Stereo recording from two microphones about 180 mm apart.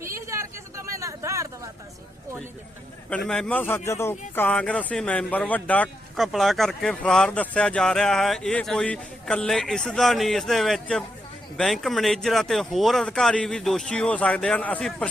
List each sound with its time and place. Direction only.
0.1 s vehicle: 15° right (ahead or behind)
3.2 s a man's voice: 5° left (ahead or behind)